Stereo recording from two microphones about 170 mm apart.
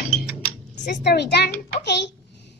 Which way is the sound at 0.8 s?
80° left.